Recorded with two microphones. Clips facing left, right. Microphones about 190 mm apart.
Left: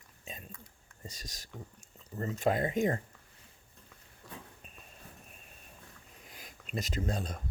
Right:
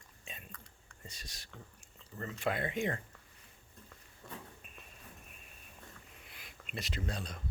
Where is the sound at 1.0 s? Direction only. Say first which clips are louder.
Left 5 dB; 40° left (ahead or behind).